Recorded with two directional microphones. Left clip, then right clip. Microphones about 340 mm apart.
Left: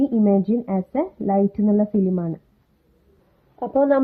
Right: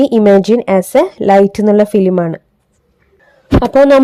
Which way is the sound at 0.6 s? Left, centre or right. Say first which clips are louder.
Right 14 dB; right.